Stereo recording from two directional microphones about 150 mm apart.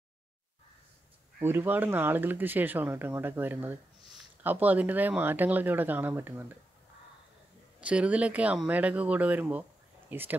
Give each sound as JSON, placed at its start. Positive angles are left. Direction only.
{"t": 1.4, "sound": "speech", "side_deg": -15}
{"t": 7.8, "sound": "speech", "side_deg": -10}